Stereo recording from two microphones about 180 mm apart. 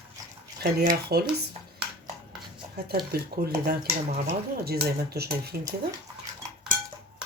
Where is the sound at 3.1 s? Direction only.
60° right (ahead or behind).